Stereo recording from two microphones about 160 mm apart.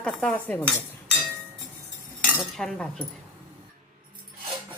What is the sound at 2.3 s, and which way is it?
Cutlery, 5° left (ahead or behind).